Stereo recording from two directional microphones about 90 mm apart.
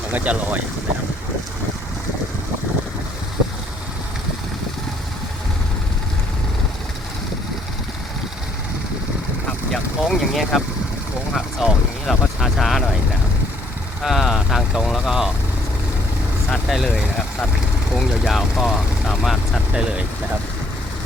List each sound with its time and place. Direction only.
0.1 s speech: 20° right (ahead or behind)
9.5 s vehicle: 5° left (ahead or behind)
14.0 s speech: centre (ahead or behind)
16.5 s speech: centre (ahead or behind)